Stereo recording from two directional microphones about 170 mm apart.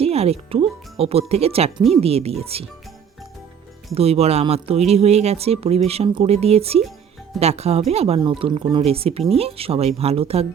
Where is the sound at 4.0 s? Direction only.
35° right (ahead or behind).